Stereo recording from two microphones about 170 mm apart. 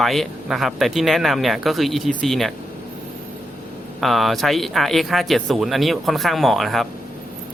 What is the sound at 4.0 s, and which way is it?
Speech, centre (ahead or behind).